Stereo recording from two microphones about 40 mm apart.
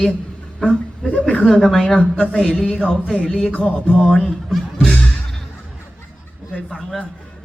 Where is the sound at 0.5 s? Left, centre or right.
Centre.